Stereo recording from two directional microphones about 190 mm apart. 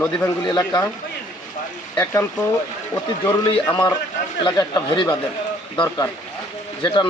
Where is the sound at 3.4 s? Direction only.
25° left (ahead or behind).